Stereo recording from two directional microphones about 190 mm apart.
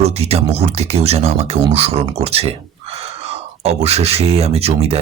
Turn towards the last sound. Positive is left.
turn(degrees=-30)  # may be behind; listen again after turning